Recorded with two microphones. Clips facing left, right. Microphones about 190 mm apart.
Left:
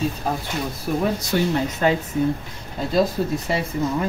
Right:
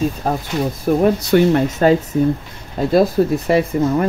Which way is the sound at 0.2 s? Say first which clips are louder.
Right 6 dB; 45° right (ahead or behind).